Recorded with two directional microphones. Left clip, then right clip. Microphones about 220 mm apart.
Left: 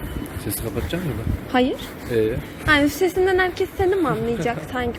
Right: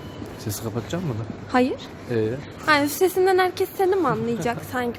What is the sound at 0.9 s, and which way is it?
Speech, 35° right (ahead or behind).